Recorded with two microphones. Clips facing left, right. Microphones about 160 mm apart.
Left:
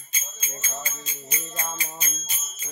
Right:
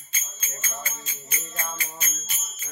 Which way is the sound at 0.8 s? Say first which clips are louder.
Left 2 dB; 15° left (ahead or behind).